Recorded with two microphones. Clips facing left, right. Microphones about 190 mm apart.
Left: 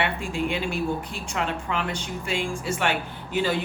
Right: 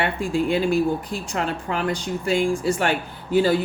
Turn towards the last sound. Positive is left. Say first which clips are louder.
# right 6 dB
turn(degrees=-35)  # may be behind; listen again after turning